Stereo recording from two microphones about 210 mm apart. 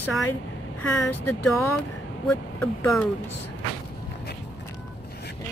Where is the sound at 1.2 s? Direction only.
10° left (ahead or behind).